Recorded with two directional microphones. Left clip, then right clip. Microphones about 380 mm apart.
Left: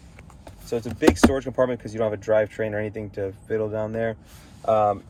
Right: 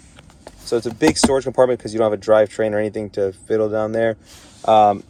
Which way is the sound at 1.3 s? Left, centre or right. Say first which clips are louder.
Right 7 dB; centre.